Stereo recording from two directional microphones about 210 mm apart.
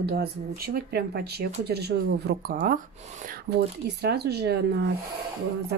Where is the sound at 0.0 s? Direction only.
50° right (ahead or behind).